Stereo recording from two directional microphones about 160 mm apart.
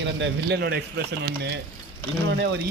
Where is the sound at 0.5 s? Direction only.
90° right.